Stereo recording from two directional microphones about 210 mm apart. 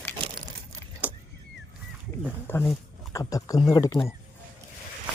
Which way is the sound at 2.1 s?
10° left (ahead or behind).